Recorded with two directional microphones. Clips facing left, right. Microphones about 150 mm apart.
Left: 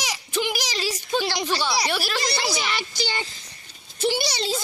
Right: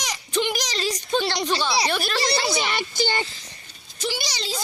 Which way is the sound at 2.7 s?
50° right (ahead or behind).